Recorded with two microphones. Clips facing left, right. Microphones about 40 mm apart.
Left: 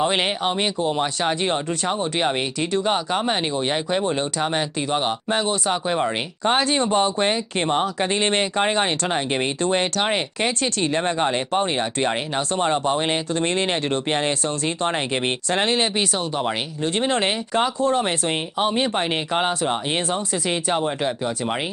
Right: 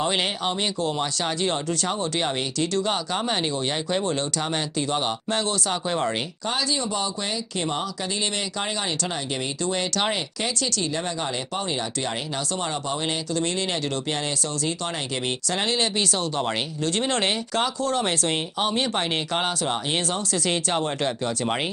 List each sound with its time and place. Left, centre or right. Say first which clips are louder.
0.0 s speech: left 3 dB; left
6.4 s speech: left 8 dB; left
16.1 s speech: left 2 dB; centre
16.8 s speech: left 3 dB; left